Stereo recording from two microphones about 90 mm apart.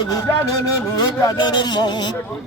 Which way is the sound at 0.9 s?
50° left (ahead or behind).